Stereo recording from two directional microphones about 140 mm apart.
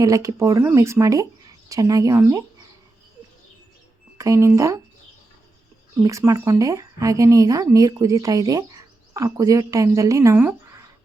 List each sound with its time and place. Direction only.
0.0 s speech: 25° right (ahead or behind)
4.2 s speech: 20° right (ahead or behind)
6.0 s speech: 25° right (ahead or behind)